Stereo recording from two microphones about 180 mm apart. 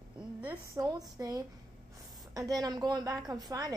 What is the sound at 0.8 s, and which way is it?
A woman's voice, 20° right (ahead or behind).